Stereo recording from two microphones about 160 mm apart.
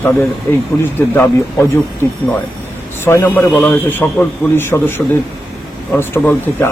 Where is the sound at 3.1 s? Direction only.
15° left (ahead or behind).